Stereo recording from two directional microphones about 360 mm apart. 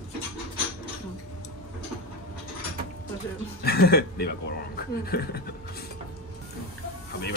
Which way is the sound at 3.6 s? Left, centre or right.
Left.